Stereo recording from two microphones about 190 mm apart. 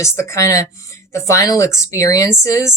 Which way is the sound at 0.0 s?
15° left (ahead or behind).